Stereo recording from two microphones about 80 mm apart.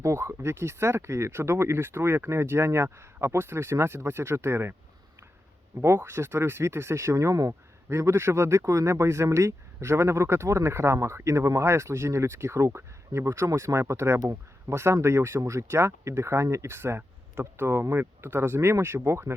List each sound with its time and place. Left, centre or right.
0.0 s speech: right
5.8 s speech: right